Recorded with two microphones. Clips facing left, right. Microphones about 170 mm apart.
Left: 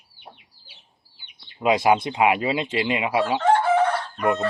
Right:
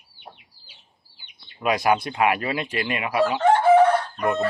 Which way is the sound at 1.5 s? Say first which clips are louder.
Left 2 dB; 20° left (ahead or behind).